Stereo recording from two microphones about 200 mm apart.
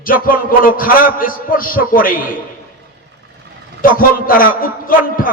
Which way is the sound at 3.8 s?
45° left (ahead or behind).